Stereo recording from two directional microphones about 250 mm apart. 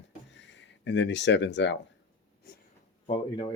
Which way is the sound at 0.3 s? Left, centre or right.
Left.